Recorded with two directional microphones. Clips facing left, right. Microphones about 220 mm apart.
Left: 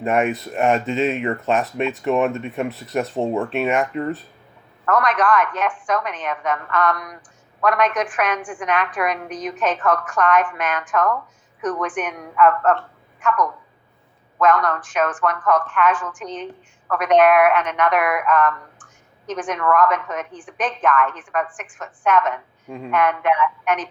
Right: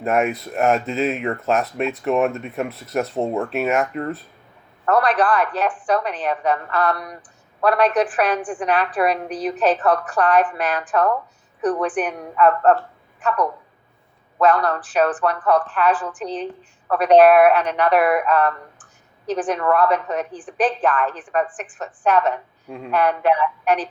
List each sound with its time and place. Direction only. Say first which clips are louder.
0.0 s speech: even; centre (ahead or behind)
4.9 s a woman's voice: right 1 dB; 35° right (ahead or behind)